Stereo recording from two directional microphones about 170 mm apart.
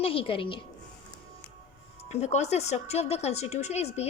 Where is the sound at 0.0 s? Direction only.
30° left (ahead or behind).